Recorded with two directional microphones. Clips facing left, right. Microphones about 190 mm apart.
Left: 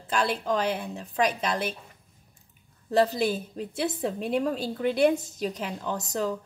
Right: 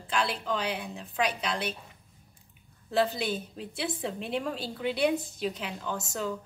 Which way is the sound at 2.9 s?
40° left (ahead or behind).